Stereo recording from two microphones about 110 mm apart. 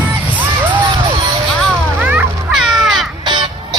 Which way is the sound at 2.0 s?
15° right (ahead or behind).